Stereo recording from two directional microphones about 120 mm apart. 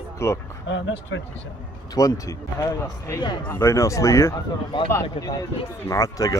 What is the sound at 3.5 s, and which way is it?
Speech, 20° left (ahead or behind).